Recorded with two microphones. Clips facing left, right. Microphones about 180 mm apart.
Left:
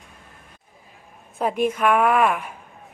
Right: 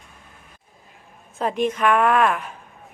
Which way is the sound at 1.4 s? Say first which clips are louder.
Even; 10° left (ahead or behind).